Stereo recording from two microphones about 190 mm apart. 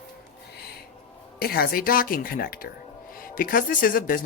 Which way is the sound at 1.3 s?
55° left (ahead or behind).